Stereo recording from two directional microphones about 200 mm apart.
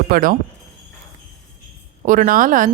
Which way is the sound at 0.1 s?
45° right (ahead or behind).